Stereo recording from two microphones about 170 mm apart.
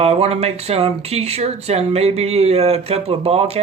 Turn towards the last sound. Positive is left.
turn(degrees=-35)  # may be behind; listen again after turning